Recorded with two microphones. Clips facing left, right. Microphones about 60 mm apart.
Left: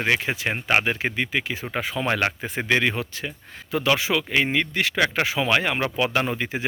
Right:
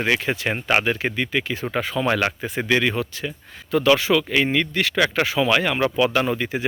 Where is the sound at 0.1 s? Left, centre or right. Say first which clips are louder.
Even; centre.